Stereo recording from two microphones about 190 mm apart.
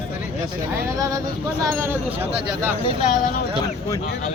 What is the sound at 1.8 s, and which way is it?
Speech, 10° right (ahead or behind).